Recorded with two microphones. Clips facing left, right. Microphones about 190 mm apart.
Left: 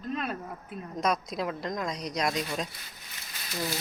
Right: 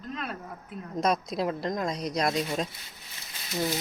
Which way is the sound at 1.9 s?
5° right (ahead or behind).